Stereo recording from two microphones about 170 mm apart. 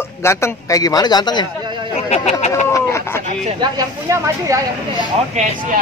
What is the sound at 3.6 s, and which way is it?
Speech, 20° right (ahead or behind).